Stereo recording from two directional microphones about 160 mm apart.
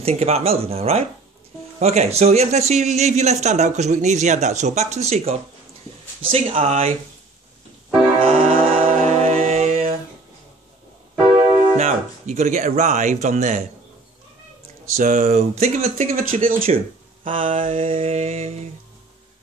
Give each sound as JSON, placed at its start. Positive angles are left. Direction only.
{"t": 0.0, "sound": "a man's voice", "side_deg": -40}
{"t": 8.2, "sound": "music", "side_deg": -40}
{"t": 11.7, "sound": "speech", "side_deg": -50}
{"t": 15.0, "sound": "a man's voice", "side_deg": -50}